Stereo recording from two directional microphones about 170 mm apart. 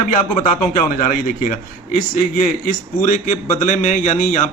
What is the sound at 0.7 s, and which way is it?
A man's voice, 55° left (ahead or behind).